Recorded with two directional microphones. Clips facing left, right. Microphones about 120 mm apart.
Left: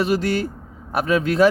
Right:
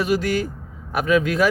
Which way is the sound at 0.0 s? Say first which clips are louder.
Left 1 dB; 30° left (ahead or behind).